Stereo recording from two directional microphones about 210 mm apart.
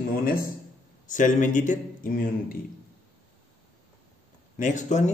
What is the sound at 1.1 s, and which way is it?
Speech, 35° left (ahead or behind).